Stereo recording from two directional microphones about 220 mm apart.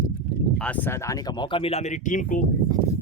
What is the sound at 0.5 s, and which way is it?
Speech, 5° left (ahead or behind).